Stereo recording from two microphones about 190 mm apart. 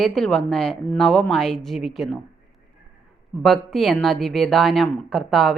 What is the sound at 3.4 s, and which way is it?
A woman's voice, centre (ahead or behind).